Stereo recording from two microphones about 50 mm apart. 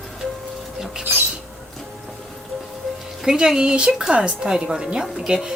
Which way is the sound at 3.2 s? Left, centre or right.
Centre.